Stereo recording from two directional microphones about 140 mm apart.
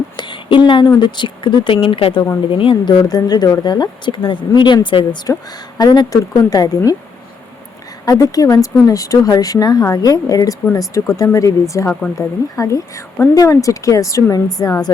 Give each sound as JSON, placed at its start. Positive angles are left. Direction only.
{"t": 0.2, "sound": "speech", "side_deg": 35}
{"t": 8.0, "sound": "speech", "side_deg": 25}